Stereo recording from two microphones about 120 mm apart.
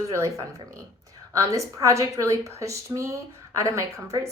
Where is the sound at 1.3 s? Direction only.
25° right (ahead or behind).